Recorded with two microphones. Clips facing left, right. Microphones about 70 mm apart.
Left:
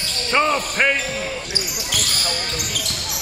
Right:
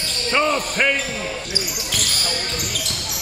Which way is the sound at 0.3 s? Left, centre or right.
Left.